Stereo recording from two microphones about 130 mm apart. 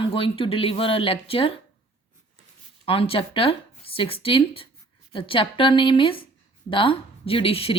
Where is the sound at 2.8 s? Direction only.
45° left (ahead or behind).